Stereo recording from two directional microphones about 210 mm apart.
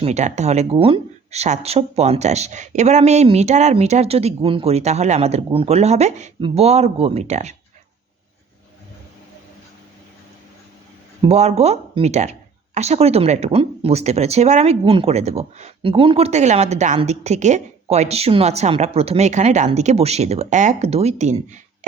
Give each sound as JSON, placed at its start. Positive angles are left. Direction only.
{"t": 0.0, "sound": "speech", "side_deg": -35}
{"t": 11.2, "sound": "speech", "side_deg": -30}